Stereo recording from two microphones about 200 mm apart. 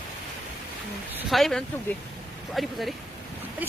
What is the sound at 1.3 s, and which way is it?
Speech, centre (ahead or behind).